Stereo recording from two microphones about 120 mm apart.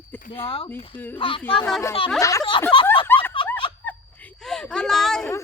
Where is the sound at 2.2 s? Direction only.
25° left (ahead or behind).